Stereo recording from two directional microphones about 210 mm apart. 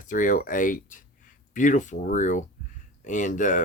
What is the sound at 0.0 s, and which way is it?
Speech, 40° left (ahead or behind).